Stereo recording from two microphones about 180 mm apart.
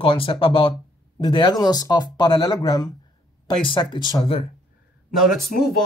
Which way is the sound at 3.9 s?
25° left (ahead or behind).